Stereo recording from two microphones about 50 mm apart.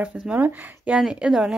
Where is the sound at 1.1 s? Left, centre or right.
Centre.